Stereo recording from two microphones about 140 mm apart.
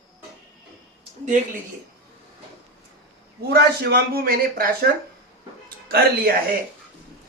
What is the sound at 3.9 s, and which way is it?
Speech, 90° right.